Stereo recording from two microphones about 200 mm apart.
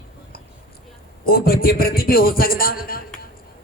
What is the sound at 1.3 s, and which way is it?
A man's voice, 50° left (ahead or behind).